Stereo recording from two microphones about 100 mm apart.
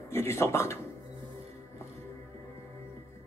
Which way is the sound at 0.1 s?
25° left (ahead or behind).